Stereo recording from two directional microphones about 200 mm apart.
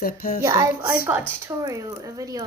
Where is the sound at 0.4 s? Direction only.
15° right (ahead or behind).